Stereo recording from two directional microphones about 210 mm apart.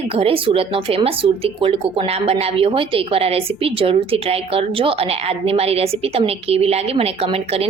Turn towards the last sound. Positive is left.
turn(degrees=-30)  # may be behind; listen again after turning